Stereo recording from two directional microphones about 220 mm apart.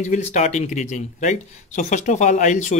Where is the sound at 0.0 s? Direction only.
30° left (ahead or behind).